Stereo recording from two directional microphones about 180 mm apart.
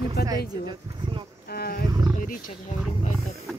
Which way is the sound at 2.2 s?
50° left (ahead or behind).